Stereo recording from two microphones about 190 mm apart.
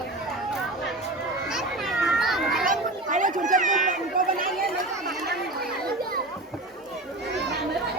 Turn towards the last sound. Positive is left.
turn(degrees=-65)  # may be behind; listen again after turning